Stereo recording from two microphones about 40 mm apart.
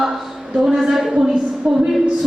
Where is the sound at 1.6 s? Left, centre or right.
Right.